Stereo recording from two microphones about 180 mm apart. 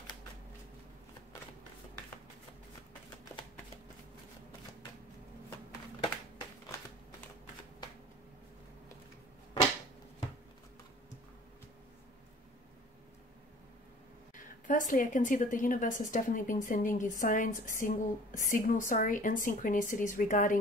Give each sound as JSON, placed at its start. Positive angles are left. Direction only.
{"t": 14.3, "sound": "speech", "side_deg": 45}